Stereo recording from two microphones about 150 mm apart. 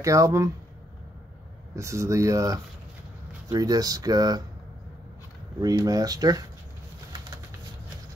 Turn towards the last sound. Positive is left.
turn(degrees=-25)  # may be behind; listen again after turning